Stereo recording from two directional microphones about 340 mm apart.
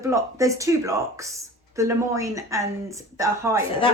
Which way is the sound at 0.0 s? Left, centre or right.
Centre.